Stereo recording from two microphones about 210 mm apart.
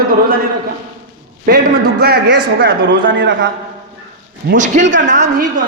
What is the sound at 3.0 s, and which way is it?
Speech, 60° right (ahead or behind).